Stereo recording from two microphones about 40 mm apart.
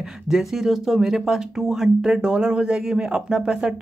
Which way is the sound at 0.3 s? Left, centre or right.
Centre.